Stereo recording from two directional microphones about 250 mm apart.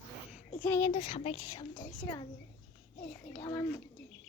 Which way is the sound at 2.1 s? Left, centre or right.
Centre.